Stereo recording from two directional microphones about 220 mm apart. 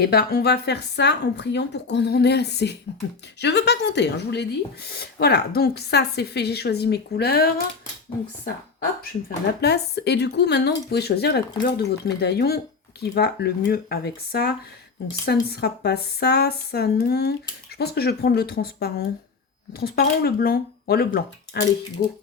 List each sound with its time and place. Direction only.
0.0 s speech: 45° left (ahead or behind)
9.6 s speech: 50° left (ahead or behind)